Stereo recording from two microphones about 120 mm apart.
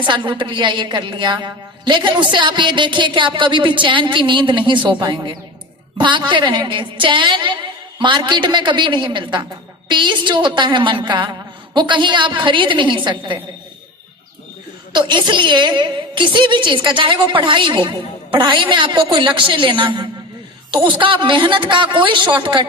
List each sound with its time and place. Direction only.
0.0 s a woman's voice: 40° right (ahead or behind)
14.9 s a woman's voice: 40° right (ahead or behind)